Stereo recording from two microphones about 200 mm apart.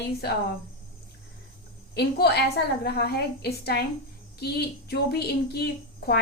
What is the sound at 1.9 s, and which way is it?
A woman's voice, 55° left (ahead or behind).